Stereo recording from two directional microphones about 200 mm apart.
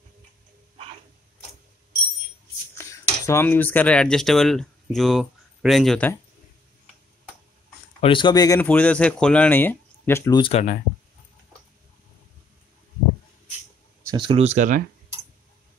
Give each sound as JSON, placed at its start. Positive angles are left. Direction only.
{"t": 2.7, "sound": "speech", "side_deg": 15}
{"t": 8.0, "sound": "speech", "side_deg": 25}
{"t": 8.5, "sound": "speech", "side_deg": 10}
{"t": 10.4, "sound": "speech", "side_deg": 35}
{"t": 14.0, "sound": "speech", "side_deg": -25}